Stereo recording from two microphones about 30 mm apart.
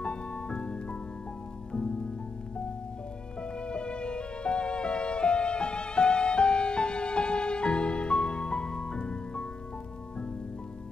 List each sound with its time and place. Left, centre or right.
0.0 s music: left
3.6 s music: left